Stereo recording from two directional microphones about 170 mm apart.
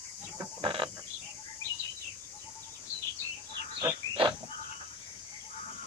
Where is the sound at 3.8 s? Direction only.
30° right (ahead or behind).